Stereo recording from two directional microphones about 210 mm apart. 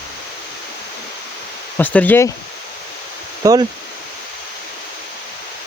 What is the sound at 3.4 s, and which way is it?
Speech, 15° right (ahead or behind).